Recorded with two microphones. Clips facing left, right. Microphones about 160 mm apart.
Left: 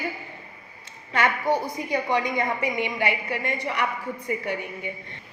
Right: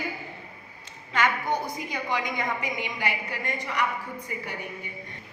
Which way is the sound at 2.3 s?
60° left (ahead or behind).